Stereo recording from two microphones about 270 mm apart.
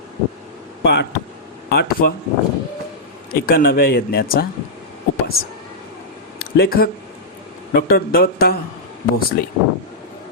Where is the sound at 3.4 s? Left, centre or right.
Left.